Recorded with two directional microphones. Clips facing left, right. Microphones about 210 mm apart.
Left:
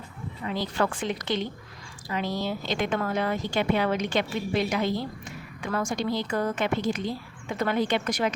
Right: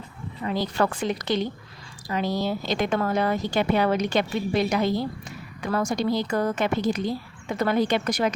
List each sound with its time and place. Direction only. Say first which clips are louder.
0.4 s speech: right 3 dB; 40° right (ahead or behind)